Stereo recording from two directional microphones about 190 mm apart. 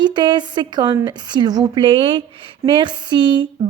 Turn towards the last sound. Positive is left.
turn(degrees=-25)  # may be behind; listen again after turning